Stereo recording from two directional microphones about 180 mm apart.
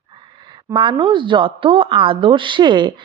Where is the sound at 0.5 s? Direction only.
25° right (ahead or behind).